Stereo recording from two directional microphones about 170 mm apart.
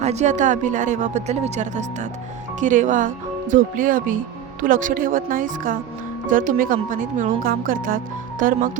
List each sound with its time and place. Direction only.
0.0 s a woman's voice: 40° right (ahead or behind)